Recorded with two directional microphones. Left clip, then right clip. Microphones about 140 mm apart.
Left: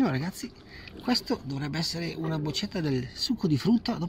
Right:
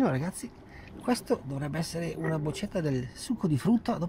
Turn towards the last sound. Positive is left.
turn(degrees=-20)  # may be behind; listen again after turning